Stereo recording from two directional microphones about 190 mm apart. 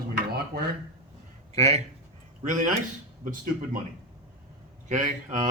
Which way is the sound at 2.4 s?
40° right (ahead or behind).